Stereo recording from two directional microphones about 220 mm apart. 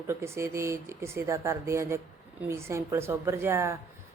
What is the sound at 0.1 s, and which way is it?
A woman's voice, 10° right (ahead or behind).